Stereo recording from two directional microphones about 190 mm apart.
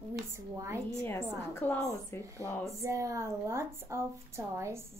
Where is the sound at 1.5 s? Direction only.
10° left (ahead or behind).